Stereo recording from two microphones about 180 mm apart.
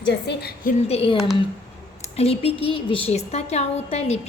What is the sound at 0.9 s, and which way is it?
A woman's voice, 35° left (ahead or behind).